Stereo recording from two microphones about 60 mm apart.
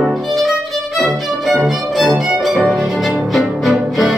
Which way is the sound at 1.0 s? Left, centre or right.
Centre.